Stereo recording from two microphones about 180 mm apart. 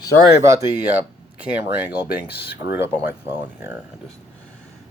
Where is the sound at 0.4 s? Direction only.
15° right (ahead or behind).